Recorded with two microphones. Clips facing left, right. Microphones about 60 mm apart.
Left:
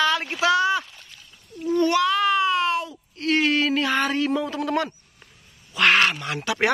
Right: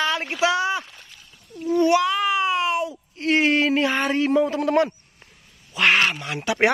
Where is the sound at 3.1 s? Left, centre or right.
Right.